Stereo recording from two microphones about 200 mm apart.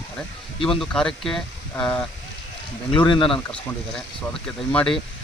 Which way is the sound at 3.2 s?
5° left (ahead or behind).